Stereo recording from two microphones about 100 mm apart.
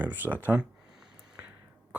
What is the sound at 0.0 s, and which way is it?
Speech, 15° right (ahead or behind).